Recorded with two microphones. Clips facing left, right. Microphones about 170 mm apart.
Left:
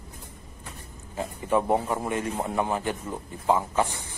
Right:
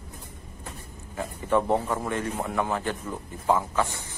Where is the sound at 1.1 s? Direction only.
20° left (ahead or behind).